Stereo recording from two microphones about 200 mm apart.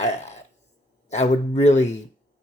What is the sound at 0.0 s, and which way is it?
Burping, 35° left (ahead or behind).